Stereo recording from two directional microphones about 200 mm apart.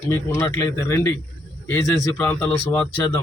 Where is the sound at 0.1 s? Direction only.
15° left (ahead or behind).